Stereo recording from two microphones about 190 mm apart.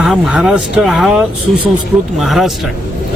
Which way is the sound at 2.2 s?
Centre (ahead or behind).